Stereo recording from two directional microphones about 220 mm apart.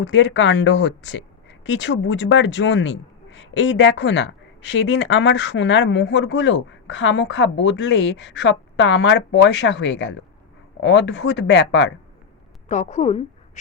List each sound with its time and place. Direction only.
0.0 s speech: 55° left (ahead or behind)
12.6 s a woman's voice: 35° left (ahead or behind)